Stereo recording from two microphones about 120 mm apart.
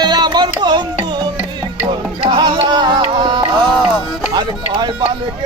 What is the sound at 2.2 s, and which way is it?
Music, 45° right (ahead or behind).